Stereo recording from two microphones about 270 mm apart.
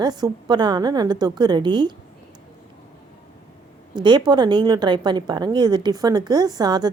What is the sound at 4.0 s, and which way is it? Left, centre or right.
A woman's voice, centre.